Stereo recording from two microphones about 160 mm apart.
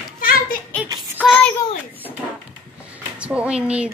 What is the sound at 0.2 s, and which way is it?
Children playing, 65° left (ahead or behind).